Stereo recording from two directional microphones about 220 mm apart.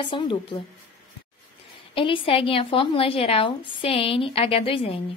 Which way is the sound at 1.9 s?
25° left (ahead or behind).